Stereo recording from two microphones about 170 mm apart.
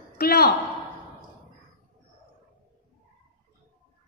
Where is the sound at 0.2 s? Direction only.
65° left (ahead or behind).